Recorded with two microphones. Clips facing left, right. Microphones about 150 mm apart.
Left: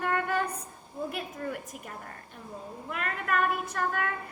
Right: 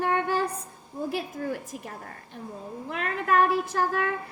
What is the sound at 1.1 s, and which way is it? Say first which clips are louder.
A woman's voice: right 8 dB; 30° right (ahead or behind).